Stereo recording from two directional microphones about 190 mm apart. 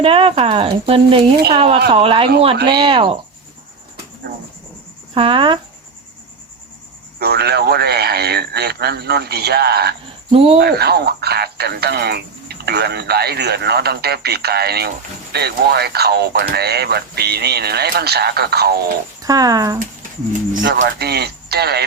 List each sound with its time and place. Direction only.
0.0 s speech: 30° right (ahead or behind)
5.1 s speech: 30° right (ahead or behind)
7.2 s speech: 55° right (ahead or behind)
10.3 s speech: 30° right (ahead or behind)
10.6 s speech: 55° right (ahead or behind)
19.2 s speech: 20° right (ahead or behind)
20.7 s speech: 50° right (ahead or behind)